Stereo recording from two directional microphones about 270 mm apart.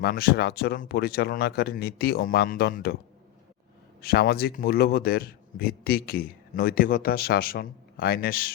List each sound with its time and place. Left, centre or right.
0.0 s speech: left
4.0 s speech: left